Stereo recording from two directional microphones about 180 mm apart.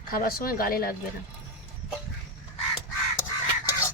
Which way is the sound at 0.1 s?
55° left (ahead or behind).